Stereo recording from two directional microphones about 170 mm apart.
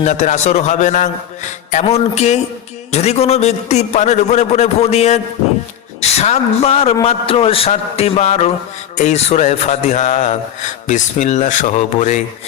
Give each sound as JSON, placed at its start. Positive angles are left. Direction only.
{"t": 0.0, "sound": "a man's voice", "side_deg": 45}